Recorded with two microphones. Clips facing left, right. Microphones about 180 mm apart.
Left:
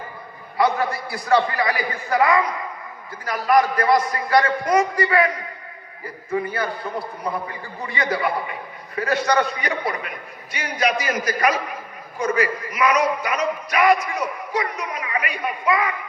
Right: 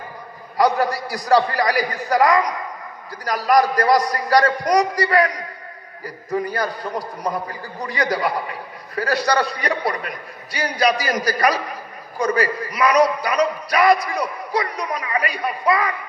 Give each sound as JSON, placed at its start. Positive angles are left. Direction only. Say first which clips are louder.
{"t": 0.5, "sound": "a man's voice", "louder": "right 2 dB", "side_deg": -40}